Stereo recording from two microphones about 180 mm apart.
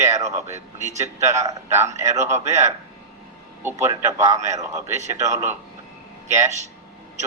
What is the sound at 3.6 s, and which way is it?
Speech, 15° right (ahead or behind).